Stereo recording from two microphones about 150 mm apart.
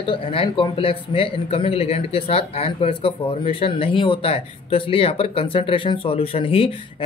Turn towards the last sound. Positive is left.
turn(degrees=40)  # may be behind; listen again after turning